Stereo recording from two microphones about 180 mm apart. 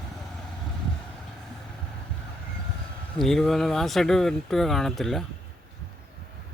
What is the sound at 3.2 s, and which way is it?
Speech, centre (ahead or behind).